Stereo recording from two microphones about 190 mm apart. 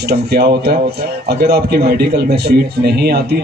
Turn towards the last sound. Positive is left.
turn(degrees=-55)  # may be behind; listen again after turning